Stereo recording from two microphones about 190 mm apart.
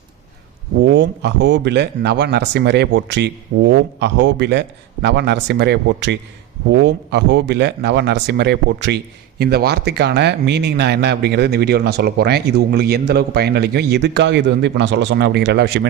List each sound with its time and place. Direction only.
0.8 s speech: 70° right (ahead or behind)